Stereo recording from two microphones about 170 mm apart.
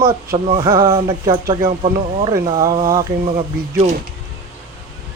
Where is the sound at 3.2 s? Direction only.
35° right (ahead or behind).